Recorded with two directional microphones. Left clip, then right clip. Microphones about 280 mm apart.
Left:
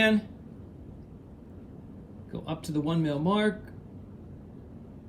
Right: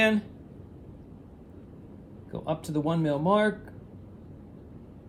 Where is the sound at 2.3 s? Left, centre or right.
Right.